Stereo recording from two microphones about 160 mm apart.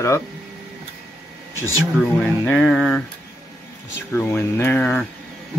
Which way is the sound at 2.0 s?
10° left (ahead or behind).